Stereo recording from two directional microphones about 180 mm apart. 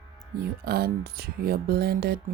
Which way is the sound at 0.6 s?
60° right (ahead or behind).